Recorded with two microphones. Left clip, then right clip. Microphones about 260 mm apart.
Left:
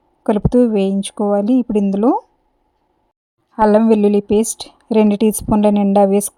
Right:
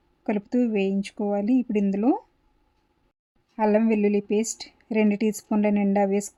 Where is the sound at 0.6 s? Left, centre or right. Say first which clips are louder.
Left 8 dB; left.